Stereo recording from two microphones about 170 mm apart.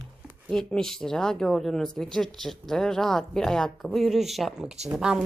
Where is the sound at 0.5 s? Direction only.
5° left (ahead or behind).